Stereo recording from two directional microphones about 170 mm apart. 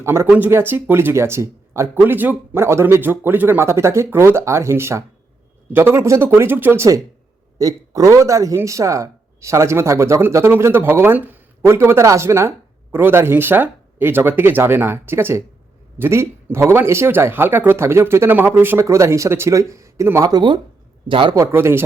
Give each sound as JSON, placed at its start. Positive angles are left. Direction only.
{"t": 0.0, "sound": "a man's voice", "side_deg": -15}
{"t": 21.3, "sound": "speech", "side_deg": -15}